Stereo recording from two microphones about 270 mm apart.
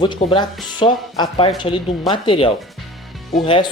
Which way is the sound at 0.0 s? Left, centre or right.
Centre.